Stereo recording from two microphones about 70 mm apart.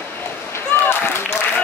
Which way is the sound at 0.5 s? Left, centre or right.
Left.